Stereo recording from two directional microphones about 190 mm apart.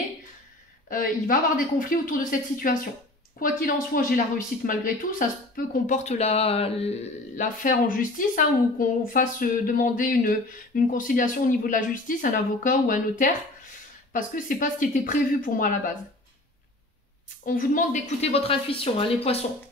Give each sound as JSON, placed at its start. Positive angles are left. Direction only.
{"t": 0.8, "sound": "a woman's voice", "side_deg": 45}
{"t": 7.6, "sound": "a woman's voice", "side_deg": 45}
{"t": 17.5, "sound": "speech", "side_deg": 45}